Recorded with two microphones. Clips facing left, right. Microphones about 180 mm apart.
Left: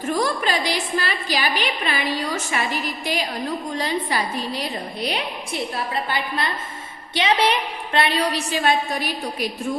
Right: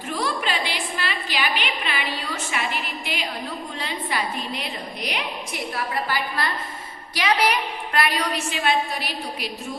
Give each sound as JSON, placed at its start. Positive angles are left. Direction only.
{"t": 0.1, "sound": "a woman's voice", "side_deg": 40}